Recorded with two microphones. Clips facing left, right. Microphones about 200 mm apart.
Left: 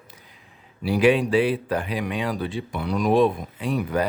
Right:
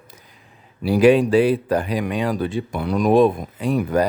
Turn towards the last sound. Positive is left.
turn(degrees=-45)  # may be behind; listen again after turning